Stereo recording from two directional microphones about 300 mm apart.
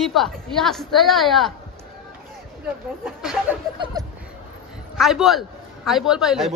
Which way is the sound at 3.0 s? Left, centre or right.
Centre.